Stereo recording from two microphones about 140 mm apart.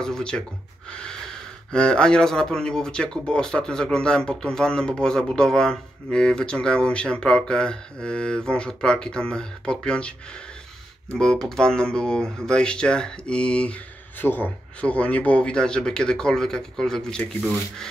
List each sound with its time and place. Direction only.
0.0 s speech: 5° left (ahead or behind)
0.8 s snort: 5° left (ahead or behind)
1.7 s speech: 5° left (ahead or behind)
11.1 s speech: 5° left (ahead or behind)